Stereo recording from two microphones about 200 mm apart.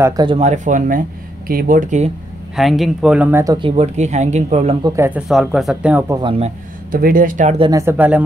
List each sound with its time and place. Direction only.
0.0 s speech: 20° right (ahead or behind); by 2.0 s 40° right (ahead or behind)
2.5 s speech: centre (ahead or behind)
3.5 s speech: 30° right (ahead or behind)
4.8 s speech: 15° right (ahead or behind)
5.3 s speech: centre (ahead or behind)
6.2 s speech: 30° right (ahead or behind)
6.9 s speech: 45° right (ahead or behind)
7.5 s speech: 25° right (ahead or behind)
7.8 s speech: 10° right (ahead or behind)